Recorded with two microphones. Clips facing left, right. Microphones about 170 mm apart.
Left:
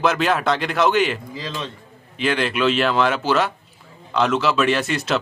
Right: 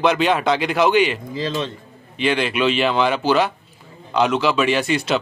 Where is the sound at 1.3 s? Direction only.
30° right (ahead or behind).